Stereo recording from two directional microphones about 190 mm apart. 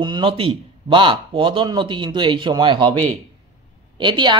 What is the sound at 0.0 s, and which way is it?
Speech, 25° right (ahead or behind).